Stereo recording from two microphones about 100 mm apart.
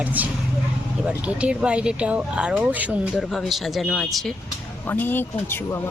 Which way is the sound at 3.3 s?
Centre (ahead or behind).